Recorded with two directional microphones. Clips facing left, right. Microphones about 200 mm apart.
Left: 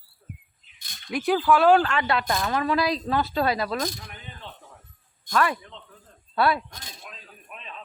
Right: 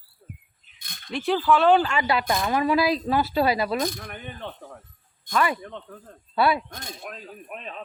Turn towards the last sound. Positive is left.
turn(degrees=-50)  # may be behind; listen again after turning